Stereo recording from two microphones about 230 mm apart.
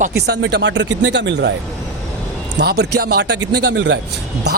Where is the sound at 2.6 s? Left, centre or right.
Right.